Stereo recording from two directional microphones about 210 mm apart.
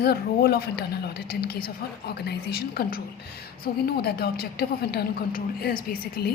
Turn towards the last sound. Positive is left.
turn(degrees=50)  # may be behind; listen again after turning